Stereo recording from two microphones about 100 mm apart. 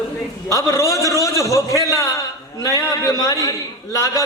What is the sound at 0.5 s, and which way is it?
Speech, 30° left (ahead or behind).